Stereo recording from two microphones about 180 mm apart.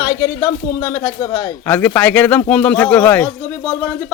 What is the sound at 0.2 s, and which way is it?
Speech, 15° left (ahead or behind).